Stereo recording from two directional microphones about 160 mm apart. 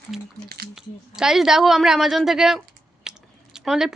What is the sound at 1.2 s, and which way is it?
A woman's voice, 5° right (ahead or behind).